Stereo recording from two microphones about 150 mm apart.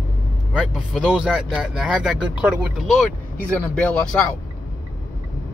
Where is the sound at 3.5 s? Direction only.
10° left (ahead or behind).